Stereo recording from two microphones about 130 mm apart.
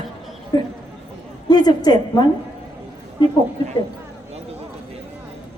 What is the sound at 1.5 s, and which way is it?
Speech, 30° left (ahead or behind).